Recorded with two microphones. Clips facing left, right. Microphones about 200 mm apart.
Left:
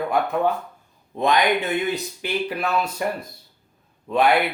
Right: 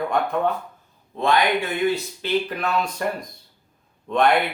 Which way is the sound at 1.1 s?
20° left (ahead or behind).